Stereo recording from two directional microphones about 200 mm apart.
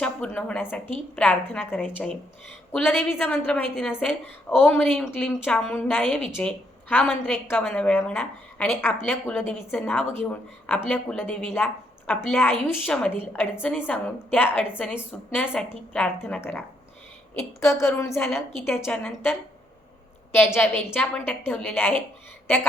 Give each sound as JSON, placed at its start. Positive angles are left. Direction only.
{"t": 0.0, "sound": "a woman's voice", "side_deg": 5}
{"t": 17.7, "sound": "a woman's voice", "side_deg": 15}